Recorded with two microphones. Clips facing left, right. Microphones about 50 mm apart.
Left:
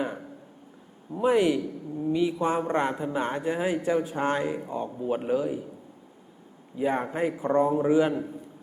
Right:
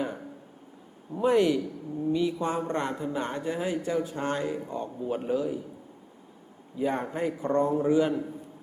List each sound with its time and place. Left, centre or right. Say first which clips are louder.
1.1 s a man's voice: left 1 dB; centre
6.7 s a man's voice: left 2 dB; centre